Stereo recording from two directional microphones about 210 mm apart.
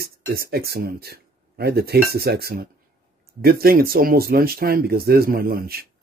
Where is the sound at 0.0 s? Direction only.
45° right (ahead or behind).